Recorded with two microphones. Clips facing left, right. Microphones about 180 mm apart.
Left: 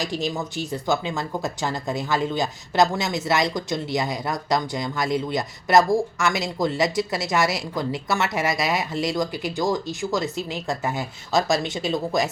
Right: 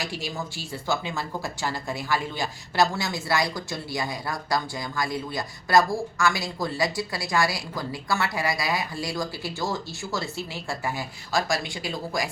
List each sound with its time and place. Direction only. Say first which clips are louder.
0.0 s speech: left 6 dB; 20° left (ahead or behind)